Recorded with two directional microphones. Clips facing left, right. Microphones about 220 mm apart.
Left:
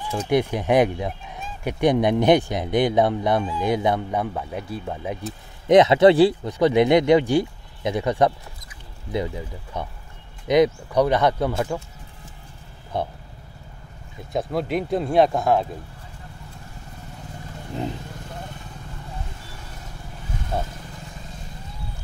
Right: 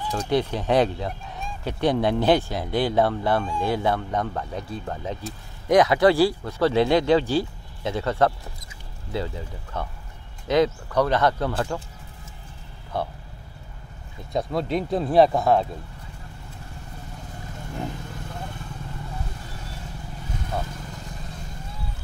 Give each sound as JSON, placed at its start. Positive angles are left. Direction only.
{"t": 0.3, "sound": "speech", "side_deg": 15}
{"t": 5.7, "sound": "speech", "side_deg": 20}
{"t": 12.9, "sound": "speech", "side_deg": 20}
{"t": 14.3, "sound": "speech", "side_deg": 0}
{"t": 20.5, "sound": "vehicle", "side_deg": 25}